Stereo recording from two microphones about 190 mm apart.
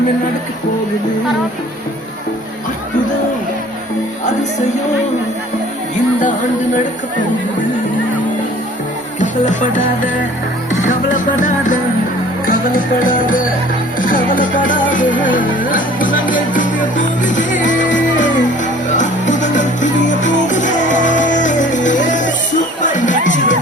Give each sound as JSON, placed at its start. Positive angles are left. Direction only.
{"t": 6.1, "sound": "speech", "side_deg": 40}
{"t": 9.2, "sound": "speech", "side_deg": 40}
{"t": 10.7, "sound": "music", "side_deg": 40}
{"t": 14.0, "sound": "speech", "side_deg": 45}
{"t": 18.9, "sound": "music", "side_deg": 40}